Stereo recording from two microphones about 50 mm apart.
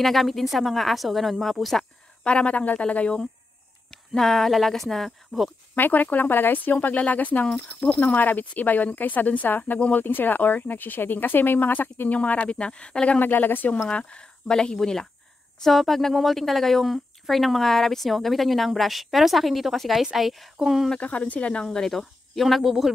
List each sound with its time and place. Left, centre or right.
0.0 s a woman's voice: centre
2.2 s speech: left
3.9 s a woman's voice: centre
5.8 s speech: left
12.1 s speech: left
13.2 s speech: left
13.8 s a woman's voice: left; by 20.9 s centre
21.0 s speech: left
21.6 s a woman's voice: centre